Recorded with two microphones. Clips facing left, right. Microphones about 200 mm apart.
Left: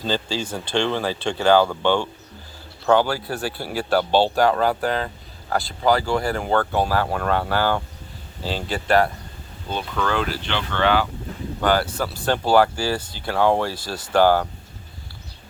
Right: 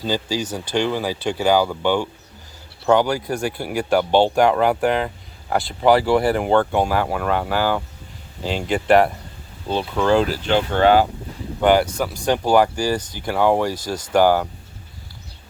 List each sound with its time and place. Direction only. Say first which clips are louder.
0.0 s speech: right 2 dB; 10° right (ahead or behind); by 6.4 s 30° right (ahead or behind)
6.4 s speech: right 3 dB; 15° right (ahead or behind)
9.6 s speech: right 6 dB; 30° right (ahead or behind)
10.3 s speech: right 7 dB; 40° right (ahead or behind)
11.6 s speech: right 5 dB; 15° right (ahead or behind)